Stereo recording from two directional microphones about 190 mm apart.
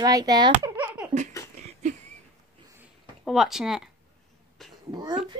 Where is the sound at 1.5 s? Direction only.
35° right (ahead or behind).